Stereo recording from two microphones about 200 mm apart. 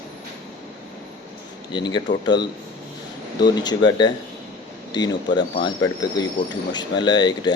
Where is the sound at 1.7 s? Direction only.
20° left (ahead or behind).